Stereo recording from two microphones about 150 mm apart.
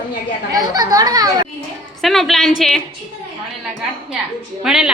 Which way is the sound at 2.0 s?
Centre (ahead or behind).